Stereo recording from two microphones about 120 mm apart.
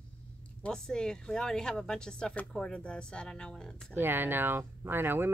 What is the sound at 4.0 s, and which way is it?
Speech, 15° right (ahead or behind).